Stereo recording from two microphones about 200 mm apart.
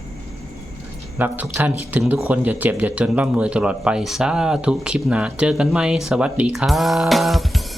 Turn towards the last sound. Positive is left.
turn(degrees=0)  # may be behind; listen again after turning